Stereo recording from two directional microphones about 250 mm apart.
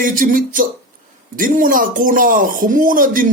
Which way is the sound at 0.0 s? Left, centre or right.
Right.